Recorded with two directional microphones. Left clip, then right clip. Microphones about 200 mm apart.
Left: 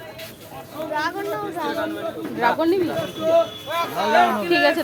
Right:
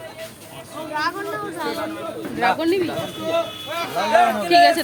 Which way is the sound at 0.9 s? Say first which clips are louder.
Right 1 dB; 5° left (ahead or behind).